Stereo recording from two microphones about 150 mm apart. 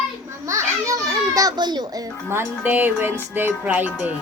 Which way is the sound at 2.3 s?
15° right (ahead or behind).